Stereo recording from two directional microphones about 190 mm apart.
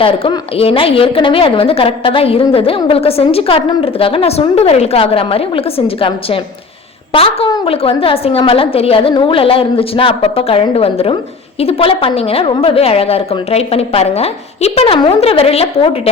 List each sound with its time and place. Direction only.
0.0 s a woman's voice: 25° left (ahead or behind)